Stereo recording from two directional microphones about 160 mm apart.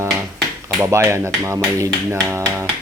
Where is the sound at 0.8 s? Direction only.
15° right (ahead or behind).